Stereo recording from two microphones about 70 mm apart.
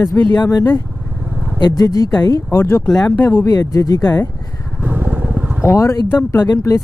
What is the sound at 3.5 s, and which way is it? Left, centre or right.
Speech, left.